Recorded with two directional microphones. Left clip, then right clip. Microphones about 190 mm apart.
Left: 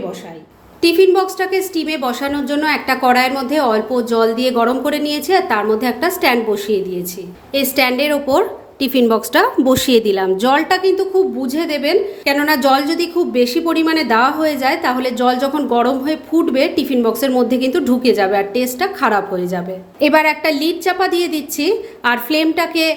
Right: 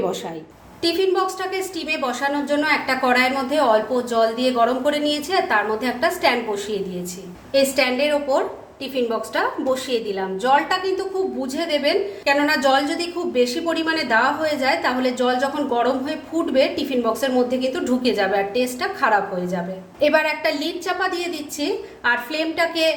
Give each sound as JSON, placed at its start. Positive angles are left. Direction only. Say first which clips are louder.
{"t": 0.8, "sound": "a woman's voice", "louder": "left 8 dB", "side_deg": 40}